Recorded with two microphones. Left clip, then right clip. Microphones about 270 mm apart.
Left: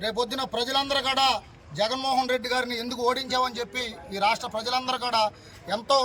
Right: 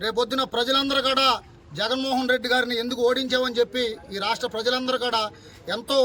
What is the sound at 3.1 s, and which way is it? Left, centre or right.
Speech, right.